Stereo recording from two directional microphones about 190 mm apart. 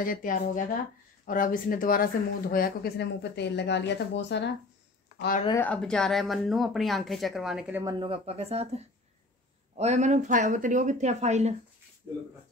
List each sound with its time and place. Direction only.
0.0 s speech: 45° left (ahead or behind); by 4.5 s 65° left (ahead or behind)
5.6 s speech: 5° left (ahead or behind)
7.8 s speech: 25° right (ahead or behind)